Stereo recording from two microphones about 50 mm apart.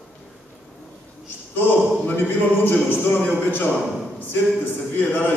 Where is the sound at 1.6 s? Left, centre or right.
Left.